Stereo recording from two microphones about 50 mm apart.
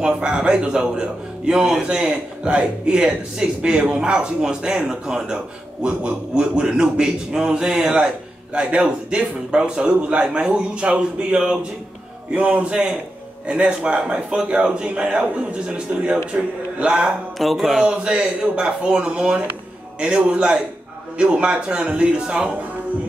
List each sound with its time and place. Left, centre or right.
0.0 s a man's voice: centre
16.3 s a man's voice: centre
17.4 s a sound: centre
18.0 s a man's voice: centre